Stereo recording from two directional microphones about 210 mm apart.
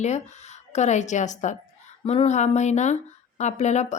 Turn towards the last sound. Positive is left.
turn(degrees=35)  # may be behind; listen again after turning